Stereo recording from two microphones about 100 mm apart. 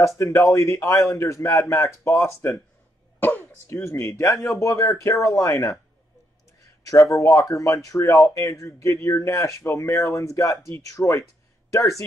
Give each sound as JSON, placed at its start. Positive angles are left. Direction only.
{"t": 0.2, "sound": "speech", "side_deg": 30}
{"t": 3.2, "sound": "a sound", "side_deg": 20}
{"t": 3.6, "sound": "speech", "side_deg": 25}
{"t": 6.9, "sound": "speech", "side_deg": 30}